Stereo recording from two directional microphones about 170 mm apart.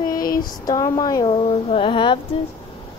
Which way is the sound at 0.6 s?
20° left (ahead or behind).